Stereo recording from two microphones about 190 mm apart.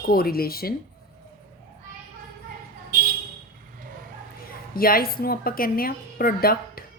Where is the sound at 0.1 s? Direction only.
50° left (ahead or behind).